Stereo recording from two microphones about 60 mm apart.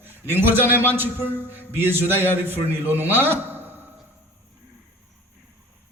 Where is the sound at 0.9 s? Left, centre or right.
Right.